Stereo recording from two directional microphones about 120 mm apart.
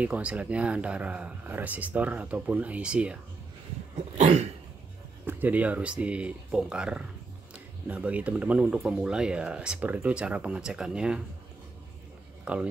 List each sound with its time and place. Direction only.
0.0 s speech: 10° right (ahead or behind)
3.9 s cough: 70° right (ahead or behind)
5.2 s speech: 15° right (ahead or behind)
12.5 s speech: 10° right (ahead or behind)